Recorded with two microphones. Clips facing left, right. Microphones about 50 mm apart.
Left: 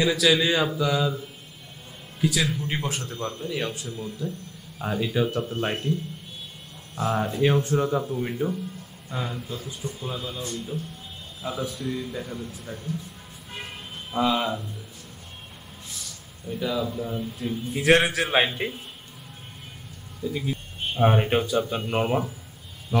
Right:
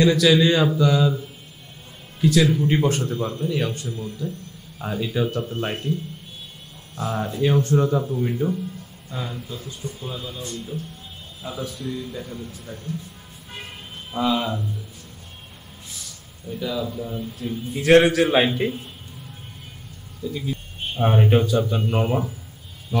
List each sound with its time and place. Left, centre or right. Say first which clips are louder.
0.0 s a man's voice: right 5 dB; centre
2.5 s a man's voice: right 9 dB; centre
7.0 s a man's voice: left 1 dB; centre
14.1 s a man's voice: right 1 dB; centre
16.4 s a man's voice: even; centre
20.2 s a man's voice: even; left